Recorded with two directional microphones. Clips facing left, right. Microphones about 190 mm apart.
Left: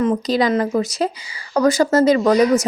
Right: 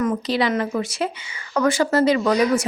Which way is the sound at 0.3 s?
40° left (ahead or behind).